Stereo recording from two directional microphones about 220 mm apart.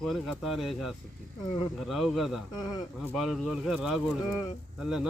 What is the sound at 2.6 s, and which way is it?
Speech, 15° left (ahead or behind).